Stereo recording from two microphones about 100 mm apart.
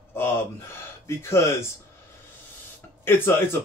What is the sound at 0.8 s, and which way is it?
Speech, 25° left (ahead or behind).